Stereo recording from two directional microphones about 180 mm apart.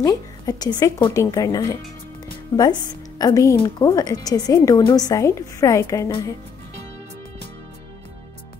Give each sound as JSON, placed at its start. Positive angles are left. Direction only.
{"t": 0.0, "sound": "a woman's voice", "side_deg": 20}
{"t": 3.2, "sound": "a woman's voice", "side_deg": 20}